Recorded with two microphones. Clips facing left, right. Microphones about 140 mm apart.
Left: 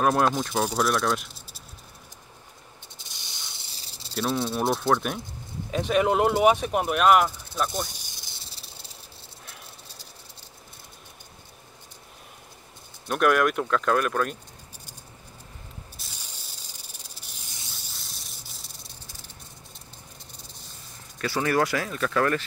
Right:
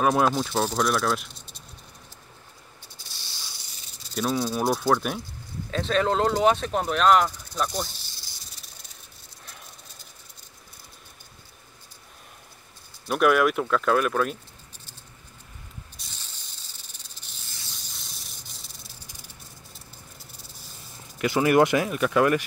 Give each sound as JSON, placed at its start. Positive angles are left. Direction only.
{"t": 0.0, "sound": "speech", "side_deg": 0}
{"t": 3.0, "sound": "spray", "side_deg": 20}
{"t": 3.7, "sound": "snake", "side_deg": 30}
{"t": 4.1, "sound": "speech", "side_deg": 0}
{"t": 5.7, "sound": "speech", "side_deg": 15}
{"t": 8.2, "sound": "snake", "side_deg": 25}
{"t": 13.1, "sound": "speech", "side_deg": 0}
{"t": 16.0, "sound": "spray", "side_deg": 5}
{"t": 17.7, "sound": "spray", "side_deg": 0}
{"t": 21.2, "sound": "speech", "side_deg": -15}